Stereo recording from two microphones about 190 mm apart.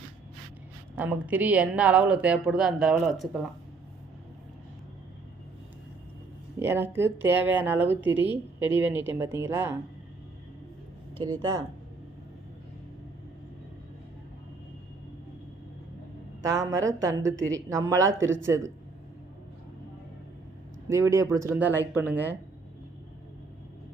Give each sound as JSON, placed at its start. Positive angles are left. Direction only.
{"t": 0.9, "sound": "a woman's voice", "side_deg": -10}
{"t": 6.6, "sound": "a woman's voice", "side_deg": -10}
{"t": 11.2, "sound": "speech", "side_deg": -20}
{"t": 16.4, "sound": "a woman's voice", "side_deg": -15}
{"t": 17.3, "sound": "speech", "side_deg": -80}
{"t": 17.7, "sound": "a woman's voice", "side_deg": -15}
{"t": 20.9, "sound": "a woman's voice", "side_deg": -15}